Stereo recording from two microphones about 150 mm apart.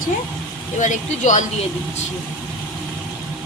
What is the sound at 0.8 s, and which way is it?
Speech, 55° left (ahead or behind).